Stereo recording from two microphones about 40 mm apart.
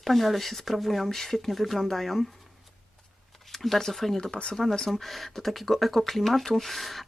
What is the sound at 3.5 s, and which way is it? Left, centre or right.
Speech, centre.